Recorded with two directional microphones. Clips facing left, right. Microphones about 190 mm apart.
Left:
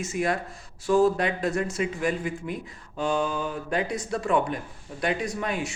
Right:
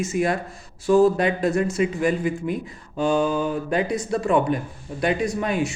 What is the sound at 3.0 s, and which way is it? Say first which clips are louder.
Speech: right 5 dB; 35° right (ahead or behind).